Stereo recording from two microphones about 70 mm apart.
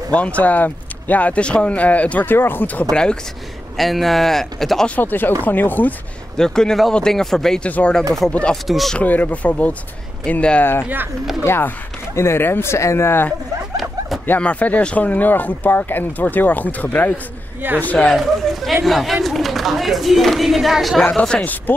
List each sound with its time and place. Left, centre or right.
0.1 s speech: centre
2.9 s speech: centre
3.7 s speech: centre
4.8 s speech: left
6.3 s speech: centre
7.6 s speech: centre
8.6 s speech: centre
8.9 s speech: left
10.6 s speech: left
14.2 s speech: left
17.6 s speech: right
18.0 s speech: centre
21.2 s speech: centre